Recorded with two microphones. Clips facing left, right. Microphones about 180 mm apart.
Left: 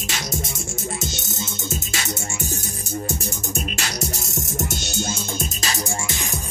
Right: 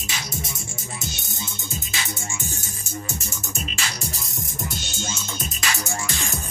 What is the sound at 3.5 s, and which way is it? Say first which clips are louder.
Music: left 3 dB; 60° left (ahead or behind).